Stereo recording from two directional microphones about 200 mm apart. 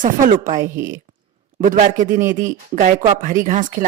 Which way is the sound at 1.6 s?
40° right (ahead or behind).